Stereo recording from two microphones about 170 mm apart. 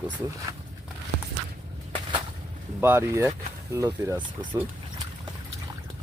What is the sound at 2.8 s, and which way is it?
Speech, 15° right (ahead or behind).